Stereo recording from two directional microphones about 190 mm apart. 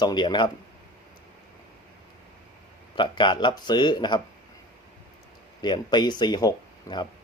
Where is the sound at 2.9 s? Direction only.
25° left (ahead or behind).